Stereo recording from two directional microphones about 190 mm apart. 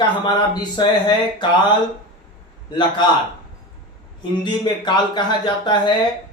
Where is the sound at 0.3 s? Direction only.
25° left (ahead or behind).